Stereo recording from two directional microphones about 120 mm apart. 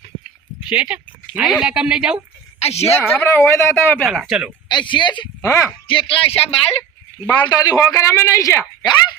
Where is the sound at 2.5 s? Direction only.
60° left (ahead or behind).